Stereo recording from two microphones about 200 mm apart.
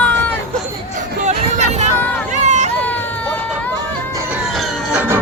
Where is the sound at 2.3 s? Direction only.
35° right (ahead or behind).